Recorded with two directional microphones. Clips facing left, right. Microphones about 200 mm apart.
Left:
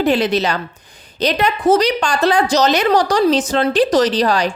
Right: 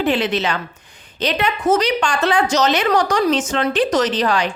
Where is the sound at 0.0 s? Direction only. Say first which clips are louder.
Left 3 dB; 40° left (ahead or behind).